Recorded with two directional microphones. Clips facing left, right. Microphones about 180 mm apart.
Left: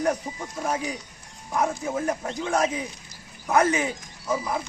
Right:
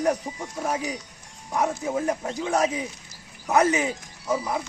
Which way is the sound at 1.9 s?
15° right (ahead or behind).